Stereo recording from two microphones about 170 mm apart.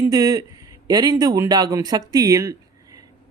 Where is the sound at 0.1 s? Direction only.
20° right (ahead or behind).